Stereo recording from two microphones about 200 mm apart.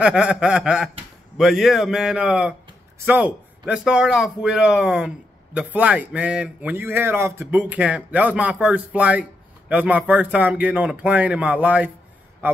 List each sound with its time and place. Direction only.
0.0 s a man's voice: 5° right (ahead or behind)